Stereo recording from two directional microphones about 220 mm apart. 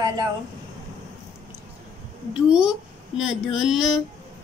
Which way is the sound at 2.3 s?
5° right (ahead or behind).